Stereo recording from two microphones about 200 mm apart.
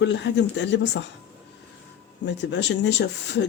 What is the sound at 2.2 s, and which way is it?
Speech, 60° left (ahead or behind).